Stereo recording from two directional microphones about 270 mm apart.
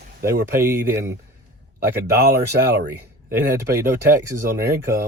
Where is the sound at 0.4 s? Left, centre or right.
Centre.